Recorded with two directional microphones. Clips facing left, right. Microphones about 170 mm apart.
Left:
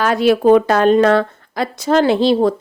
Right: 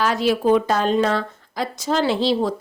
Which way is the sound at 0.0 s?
60° left (ahead or behind).